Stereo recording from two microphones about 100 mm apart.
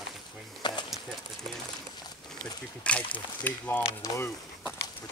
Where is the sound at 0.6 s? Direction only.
50° left (ahead or behind).